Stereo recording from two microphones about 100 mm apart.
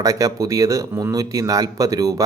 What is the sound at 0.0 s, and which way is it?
A man's voice, 35° right (ahead or behind).